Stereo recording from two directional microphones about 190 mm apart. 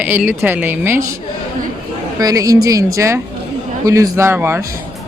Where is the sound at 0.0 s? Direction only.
10° right (ahead or behind).